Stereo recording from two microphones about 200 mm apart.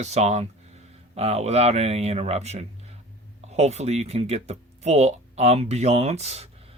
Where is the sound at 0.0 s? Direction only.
35° right (ahead or behind).